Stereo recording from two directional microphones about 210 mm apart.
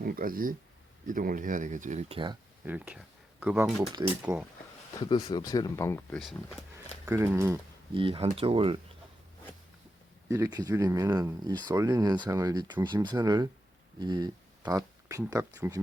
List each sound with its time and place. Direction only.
0.0 s speech: 45° right (ahead or behind); by 2.4 s 25° right (ahead or behind)
2.6 s speech: 5° right (ahead or behind)
4.9 s speech: 20° left (ahead or behind); by 6.6 s centre (ahead or behind)
7.0 s speech: 15° right (ahead or behind)
7.9 s speech: 25° right (ahead or behind)
10.2 s speech: 15° right (ahead or behind)